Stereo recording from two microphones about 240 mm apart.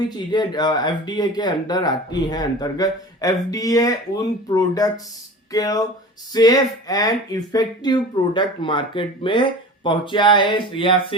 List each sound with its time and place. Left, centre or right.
0.3 s speech: centre